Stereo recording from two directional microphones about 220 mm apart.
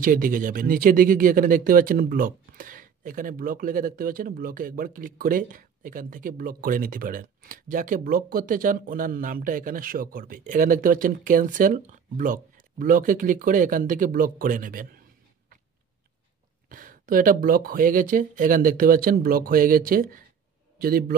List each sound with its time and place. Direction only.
0.0 s speech: 40° right (ahead or behind)
16.6 s speech: 40° right (ahead or behind)